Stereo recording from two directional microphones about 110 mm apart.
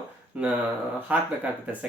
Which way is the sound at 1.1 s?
15° right (ahead or behind).